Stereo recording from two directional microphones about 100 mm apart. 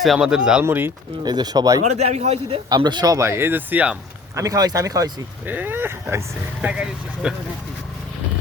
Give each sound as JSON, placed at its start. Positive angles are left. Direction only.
{"t": 0.0, "sound": "speech", "side_deg": -5}
{"t": 0.6, "sound": "speech", "side_deg": -25}
{"t": 1.2, "sound": "speech", "side_deg": -45}
{"t": 2.0, "sound": "a man's voice", "side_deg": -90}
{"t": 2.6, "sound": "a man's voice", "side_deg": -45}
{"t": 3.2, "sound": "speech", "side_deg": -25}
{"t": 4.4, "sound": "speech", "side_deg": -35}
{"t": 5.5, "sound": "speech", "side_deg": -20}
{"t": 6.6, "sound": "speech", "side_deg": -15}